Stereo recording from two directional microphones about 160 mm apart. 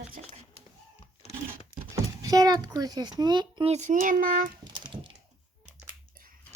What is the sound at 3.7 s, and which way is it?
Speech, 50° right (ahead or behind).